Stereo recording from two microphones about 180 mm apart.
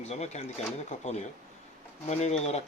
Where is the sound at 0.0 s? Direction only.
35° left (ahead or behind).